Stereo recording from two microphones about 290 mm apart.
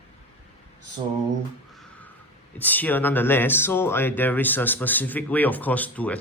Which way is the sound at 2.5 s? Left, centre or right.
Centre.